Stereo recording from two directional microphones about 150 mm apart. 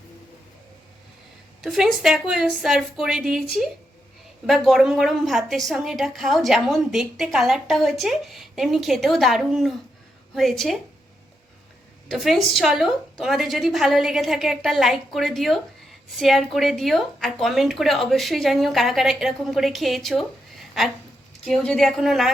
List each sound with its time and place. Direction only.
1.6 s a woman's voice: centre (ahead or behind)
4.4 s a woman's voice: centre (ahead or behind)
12.0 s a woman's voice: centre (ahead or behind)